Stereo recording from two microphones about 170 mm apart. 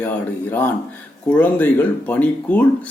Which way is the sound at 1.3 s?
10° left (ahead or behind).